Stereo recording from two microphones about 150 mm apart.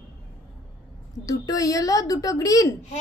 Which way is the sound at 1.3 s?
25° left (ahead or behind).